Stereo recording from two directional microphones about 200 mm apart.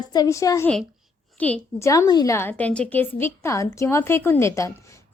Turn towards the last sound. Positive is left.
turn(degrees=15)  # may be behind; listen again after turning